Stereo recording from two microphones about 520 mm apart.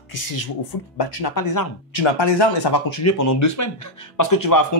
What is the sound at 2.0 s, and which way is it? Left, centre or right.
Speech, left.